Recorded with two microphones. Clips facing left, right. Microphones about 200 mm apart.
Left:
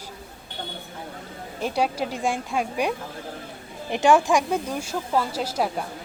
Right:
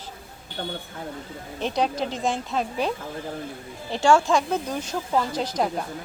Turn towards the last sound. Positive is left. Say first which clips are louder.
# right 1 dB
turn(degrees=5)  # may be behind; listen again after turning